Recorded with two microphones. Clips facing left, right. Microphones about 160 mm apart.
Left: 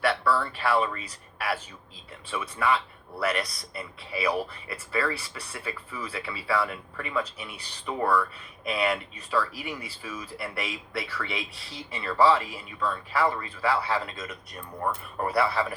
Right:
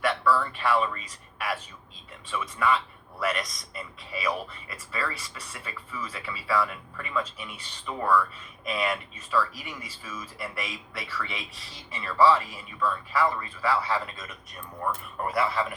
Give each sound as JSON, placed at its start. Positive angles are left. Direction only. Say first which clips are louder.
{"t": 0.0, "sound": "speech", "louder": "even", "side_deg": 30}
{"t": 2.3, "sound": "speech", "louder": "even", "side_deg": 30}